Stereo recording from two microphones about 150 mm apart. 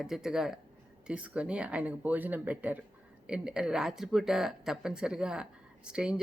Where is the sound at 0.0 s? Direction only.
5° right (ahead or behind).